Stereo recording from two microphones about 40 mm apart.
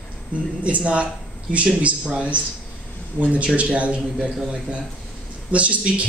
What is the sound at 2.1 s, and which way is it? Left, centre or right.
Speech, right.